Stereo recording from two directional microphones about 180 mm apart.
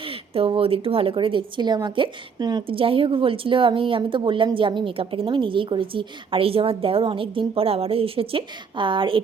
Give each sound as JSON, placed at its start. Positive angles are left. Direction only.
{"t": 0.0, "sound": "a woman's voice", "side_deg": -30}